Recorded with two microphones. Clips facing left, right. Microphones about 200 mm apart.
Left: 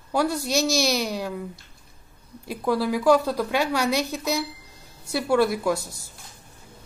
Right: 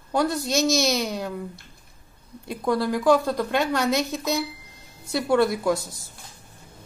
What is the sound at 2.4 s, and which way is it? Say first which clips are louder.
A woman's voice: even; 5° left (ahead or behind).